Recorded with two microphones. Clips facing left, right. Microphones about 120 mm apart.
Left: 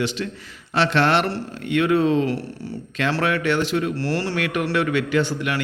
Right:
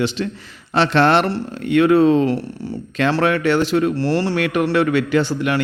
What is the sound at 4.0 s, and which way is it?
Speech, 20° right (ahead or behind).